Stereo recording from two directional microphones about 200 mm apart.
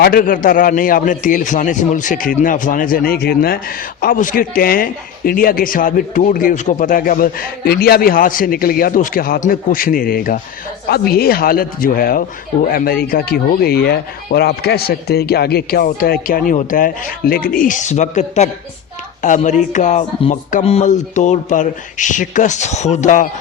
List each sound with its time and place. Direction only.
0.0 s speech: 45° left (ahead or behind)